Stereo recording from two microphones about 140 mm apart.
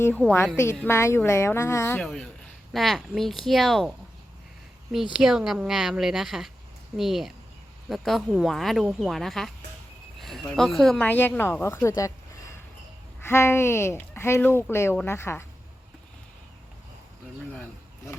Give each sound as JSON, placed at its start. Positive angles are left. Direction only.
{"t": 0.0, "sound": "speech", "side_deg": 10}
{"t": 0.5, "sound": "speech", "side_deg": 20}
{"t": 2.0, "sound": "speech", "side_deg": 5}
{"t": 5.1, "sound": "speech", "side_deg": -5}
{"t": 13.2, "sound": "speech", "side_deg": 20}